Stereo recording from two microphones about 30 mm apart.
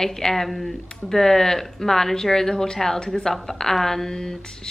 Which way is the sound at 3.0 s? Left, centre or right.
Left.